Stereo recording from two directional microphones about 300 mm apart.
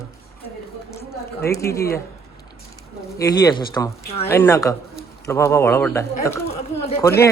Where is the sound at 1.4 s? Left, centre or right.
Centre.